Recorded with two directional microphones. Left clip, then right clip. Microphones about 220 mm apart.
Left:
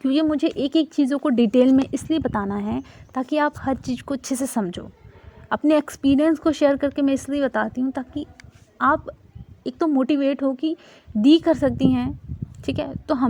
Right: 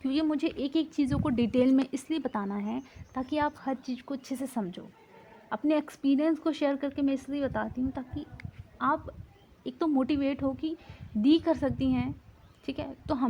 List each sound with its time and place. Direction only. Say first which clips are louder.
0.0 s speech: left 9 dB; 30° left (ahead or behind)
9.6 s speech: left 8 dB; 30° left (ahead or behind)